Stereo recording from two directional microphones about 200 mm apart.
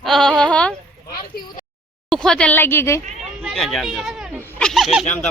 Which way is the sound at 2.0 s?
5° left (ahead or behind).